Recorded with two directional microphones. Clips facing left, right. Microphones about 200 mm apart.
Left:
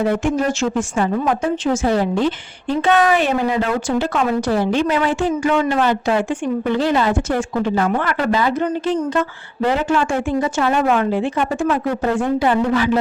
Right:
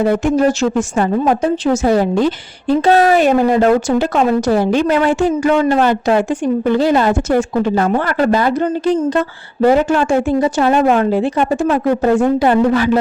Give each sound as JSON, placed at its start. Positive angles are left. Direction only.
{"t": 0.0, "sound": "a woman's voice", "side_deg": -35}
{"t": 8.6, "sound": "a woman's voice", "side_deg": -30}